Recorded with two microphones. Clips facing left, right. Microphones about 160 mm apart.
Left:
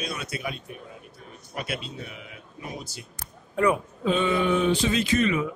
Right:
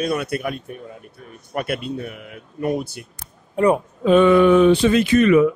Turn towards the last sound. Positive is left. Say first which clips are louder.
# right 9 dB
turn(degrees=-60)  # may be behind; listen again after turning